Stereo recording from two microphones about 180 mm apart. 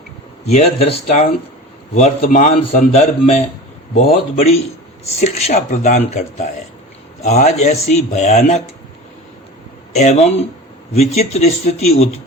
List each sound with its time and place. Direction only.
0.4 s speech: 35° left (ahead or behind)
9.9 s speech: 40° left (ahead or behind)